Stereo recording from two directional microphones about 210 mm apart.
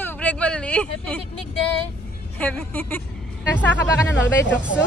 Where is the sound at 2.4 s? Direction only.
10° left (ahead or behind).